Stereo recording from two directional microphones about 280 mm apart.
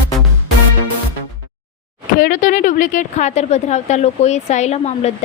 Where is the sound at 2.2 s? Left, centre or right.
Left.